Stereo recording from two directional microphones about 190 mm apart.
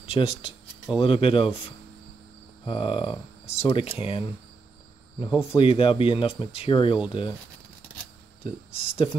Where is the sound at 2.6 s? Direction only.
25° left (ahead or behind).